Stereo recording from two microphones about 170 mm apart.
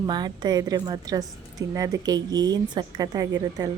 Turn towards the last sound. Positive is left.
turn(degrees=-20)  # may be behind; listen again after turning